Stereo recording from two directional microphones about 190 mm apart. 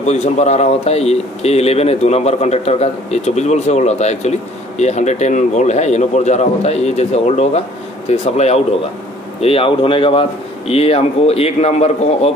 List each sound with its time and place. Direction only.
0.0 s speech: 35° left (ahead or behind)